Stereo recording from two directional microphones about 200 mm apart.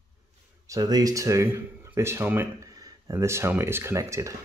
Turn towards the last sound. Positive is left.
turn(degrees=-15)  # may be behind; listen again after turning